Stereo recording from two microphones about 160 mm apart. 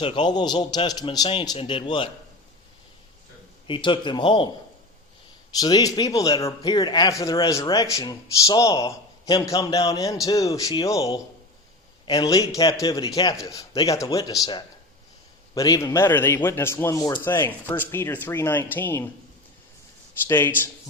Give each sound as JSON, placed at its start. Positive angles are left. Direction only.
{"t": 0.0, "sound": "a man's voice", "side_deg": 30}
{"t": 3.7, "sound": "a man's voice", "side_deg": 30}
{"t": 5.5, "sound": "speech", "side_deg": 25}
{"t": 15.5, "sound": "speech", "side_deg": 20}
{"t": 17.2, "sound": "speech", "side_deg": 15}
{"t": 20.2, "sound": "speech", "side_deg": 15}